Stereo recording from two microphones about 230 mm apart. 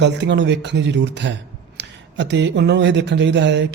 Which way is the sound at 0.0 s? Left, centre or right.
Right.